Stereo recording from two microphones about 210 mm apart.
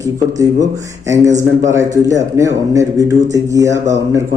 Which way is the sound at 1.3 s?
35° right (ahead or behind).